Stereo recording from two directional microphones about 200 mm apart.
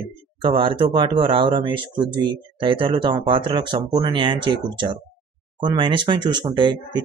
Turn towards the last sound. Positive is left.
turn(degrees=-20)  # may be behind; listen again after turning